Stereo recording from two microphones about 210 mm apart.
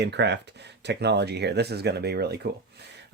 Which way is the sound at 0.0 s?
55° right (ahead or behind).